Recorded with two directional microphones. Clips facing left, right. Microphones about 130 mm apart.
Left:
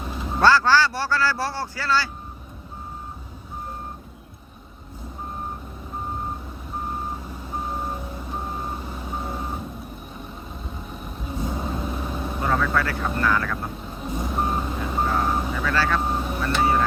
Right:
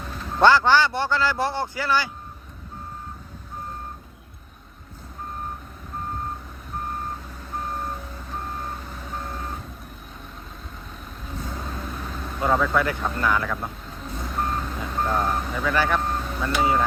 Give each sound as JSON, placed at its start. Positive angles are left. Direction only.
{"t": 0.0, "sound": "vehicle", "side_deg": 10}
{"t": 0.4, "sound": "speech", "side_deg": -20}
{"t": 6.8, "sound": "reversing beeps", "side_deg": 10}
{"t": 10.9, "sound": "vehicle", "side_deg": 10}
{"t": 12.7, "sound": "speech", "side_deg": -20}
{"t": 13.6, "sound": "reversing beeps", "side_deg": 15}
{"t": 15.3, "sound": "speech", "side_deg": 20}
{"t": 15.6, "sound": "speech", "side_deg": -15}
{"t": 16.0, "sound": "vehicle", "side_deg": 15}